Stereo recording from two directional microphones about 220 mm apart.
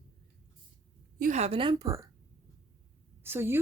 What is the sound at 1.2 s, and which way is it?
Speech, 30° right (ahead or behind).